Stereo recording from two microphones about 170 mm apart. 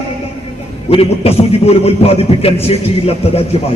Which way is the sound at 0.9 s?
35° left (ahead or behind).